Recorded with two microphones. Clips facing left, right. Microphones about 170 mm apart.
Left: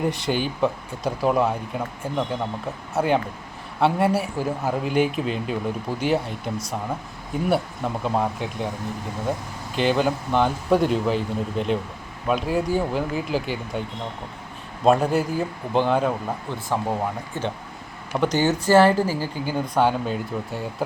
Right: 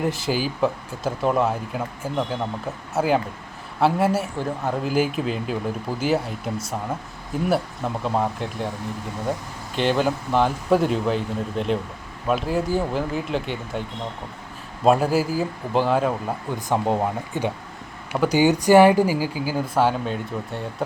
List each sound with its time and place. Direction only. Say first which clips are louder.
0.0 s speech: even; centre (ahead or behind)
9.7 s speech: even; centre (ahead or behind)
14.8 s speech: even; 5° right (ahead or behind)
16.6 s speech: right 4 dB; 20° right (ahead or behind); by 20.8 s centre (ahead or behind)